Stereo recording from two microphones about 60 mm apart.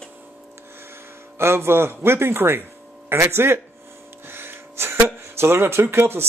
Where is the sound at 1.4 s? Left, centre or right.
Right.